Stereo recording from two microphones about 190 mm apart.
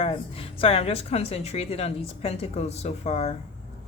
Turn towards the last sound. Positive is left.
turn(degrees=35)  # may be behind; listen again after turning